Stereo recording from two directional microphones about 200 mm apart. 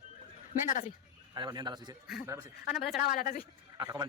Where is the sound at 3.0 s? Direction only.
45° left (ahead or behind).